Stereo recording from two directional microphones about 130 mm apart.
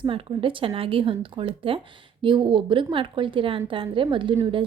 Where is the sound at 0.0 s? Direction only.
40° right (ahead or behind).